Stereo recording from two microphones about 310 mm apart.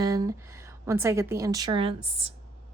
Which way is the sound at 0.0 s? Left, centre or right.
Centre.